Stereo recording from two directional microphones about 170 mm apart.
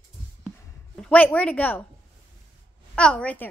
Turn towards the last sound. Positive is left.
turn(degrees=10)  # may be behind; listen again after turning